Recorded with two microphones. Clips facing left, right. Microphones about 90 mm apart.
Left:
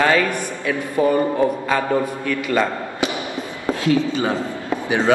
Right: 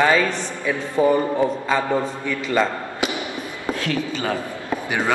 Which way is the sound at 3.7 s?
25° left (ahead or behind).